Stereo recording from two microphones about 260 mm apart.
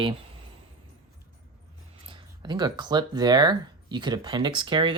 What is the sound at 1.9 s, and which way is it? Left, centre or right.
Speech, centre.